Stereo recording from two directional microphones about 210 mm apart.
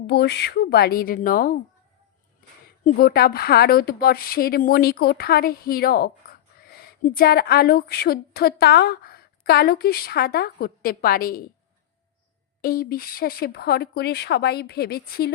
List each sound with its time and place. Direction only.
0.1 s a woman's voice: 50° left (ahead or behind)
2.8 s a woman's voice: 45° left (ahead or behind)
12.6 s a woman's voice: 45° left (ahead or behind)